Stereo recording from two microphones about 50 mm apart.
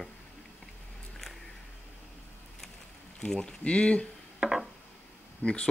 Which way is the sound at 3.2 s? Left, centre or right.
Centre.